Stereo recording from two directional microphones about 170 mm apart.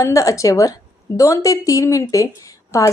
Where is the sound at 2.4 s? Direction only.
20° left (ahead or behind).